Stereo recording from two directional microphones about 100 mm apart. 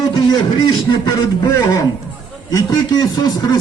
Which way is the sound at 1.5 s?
35° left (ahead or behind).